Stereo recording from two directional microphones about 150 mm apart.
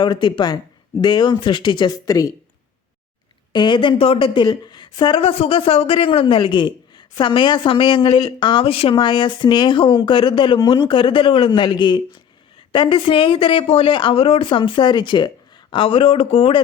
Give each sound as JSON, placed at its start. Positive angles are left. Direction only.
{"t": 0.0, "sound": "speech", "side_deg": 30}
{"t": 3.5, "sound": "a woman's voice", "side_deg": 30}